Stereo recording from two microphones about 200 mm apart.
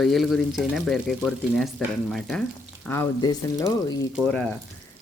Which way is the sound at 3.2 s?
20° left (ahead or behind).